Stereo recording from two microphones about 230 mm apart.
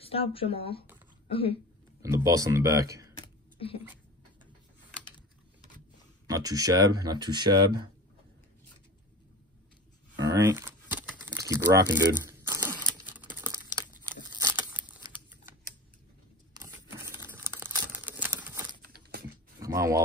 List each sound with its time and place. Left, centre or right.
0.0 s speech: left
2.0 s speech: centre
3.2 s a sound: left
6.2 s speech: centre
10.1 s crumpling: centre
13.2 s computer keyboard: centre
15.1 s typing: centre
16.5 s crumpling: centre
19.6 s a sound: centre